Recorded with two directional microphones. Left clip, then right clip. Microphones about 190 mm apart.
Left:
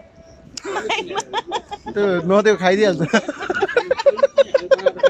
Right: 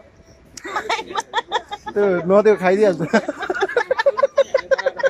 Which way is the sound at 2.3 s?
5° right (ahead or behind).